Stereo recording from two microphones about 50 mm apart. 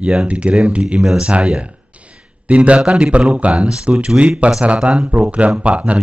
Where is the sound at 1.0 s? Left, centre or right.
Centre.